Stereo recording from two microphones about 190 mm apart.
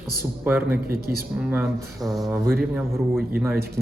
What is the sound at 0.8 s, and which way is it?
Speech, 55° right (ahead or behind).